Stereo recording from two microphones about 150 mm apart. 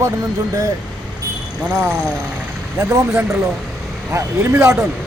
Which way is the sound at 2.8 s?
15° right (ahead or behind).